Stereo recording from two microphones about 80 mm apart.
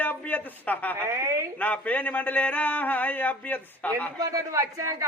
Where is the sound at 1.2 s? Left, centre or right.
Right.